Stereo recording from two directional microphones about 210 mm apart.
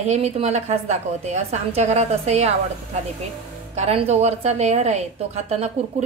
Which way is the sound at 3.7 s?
30° right (ahead or behind).